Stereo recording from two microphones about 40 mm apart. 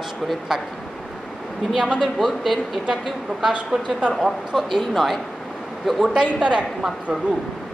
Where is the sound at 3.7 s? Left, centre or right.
Centre.